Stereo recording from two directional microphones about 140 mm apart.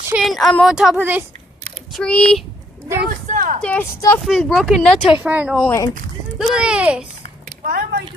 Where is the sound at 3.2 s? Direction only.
65° right (ahead or behind).